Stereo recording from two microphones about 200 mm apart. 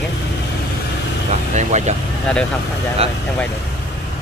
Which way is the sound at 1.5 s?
35° right (ahead or behind).